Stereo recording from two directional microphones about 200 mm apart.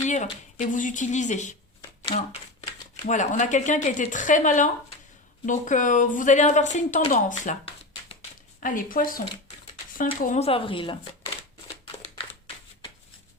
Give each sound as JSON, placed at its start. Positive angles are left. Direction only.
{"t": 0.0, "sound": "speech", "side_deg": 35}
{"t": 2.0, "sound": "shuffling cards", "side_deg": 35}
{"t": 3.1, "sound": "speech", "side_deg": 40}